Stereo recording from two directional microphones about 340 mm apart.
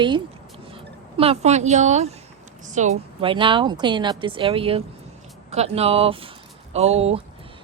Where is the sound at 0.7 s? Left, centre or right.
Centre.